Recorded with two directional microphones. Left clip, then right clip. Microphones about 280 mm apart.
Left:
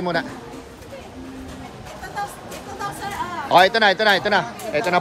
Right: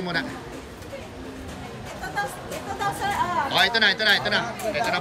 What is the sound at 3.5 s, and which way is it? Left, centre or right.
A man's voice, centre.